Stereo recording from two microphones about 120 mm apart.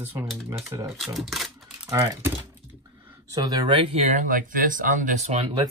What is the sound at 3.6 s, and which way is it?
Speech, 50° right (ahead or behind).